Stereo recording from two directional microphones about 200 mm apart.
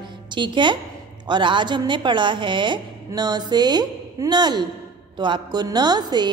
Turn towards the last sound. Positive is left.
turn(degrees=-20)  # may be behind; listen again after turning